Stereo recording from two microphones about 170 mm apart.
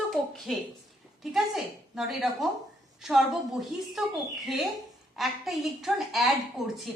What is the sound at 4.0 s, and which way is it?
Speech, 5° right (ahead or behind).